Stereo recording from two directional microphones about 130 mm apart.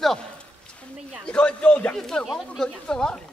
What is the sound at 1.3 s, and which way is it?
A man's voice, 10° left (ahead or behind).